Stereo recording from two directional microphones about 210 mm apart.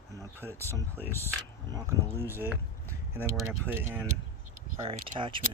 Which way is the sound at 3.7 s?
10° right (ahead or behind).